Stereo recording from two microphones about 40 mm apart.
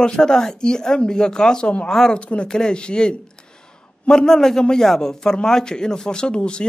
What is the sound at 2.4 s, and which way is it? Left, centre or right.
A man's voice, centre.